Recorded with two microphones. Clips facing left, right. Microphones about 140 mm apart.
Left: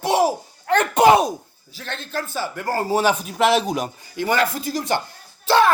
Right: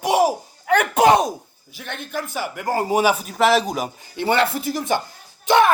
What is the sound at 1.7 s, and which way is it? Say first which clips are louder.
Speech: even; 15° right (ahead or behind).